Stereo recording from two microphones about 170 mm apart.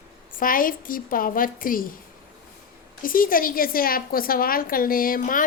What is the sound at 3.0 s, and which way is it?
A woman's voice, 55° left (ahead or behind).